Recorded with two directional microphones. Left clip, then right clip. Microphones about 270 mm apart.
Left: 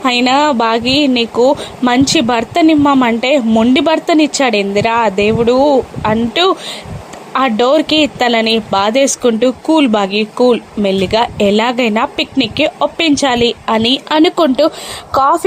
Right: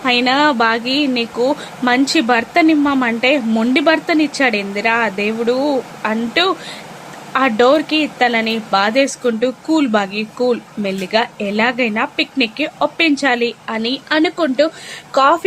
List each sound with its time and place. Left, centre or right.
0.0 s speech: centre